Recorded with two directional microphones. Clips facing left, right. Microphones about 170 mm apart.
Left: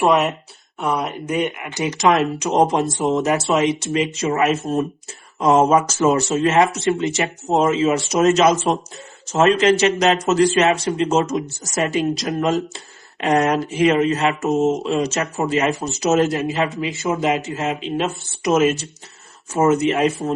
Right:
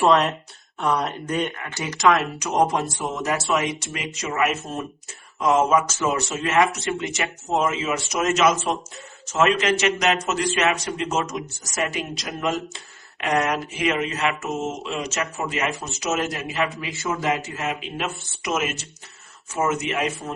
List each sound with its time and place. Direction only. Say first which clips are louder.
0.8 s speech: left 1 dB; centre (ahead or behind)
1.4 s speech: left 7 dB; 15° left (ahead or behind); by 20.3 s 35° left (ahead or behind)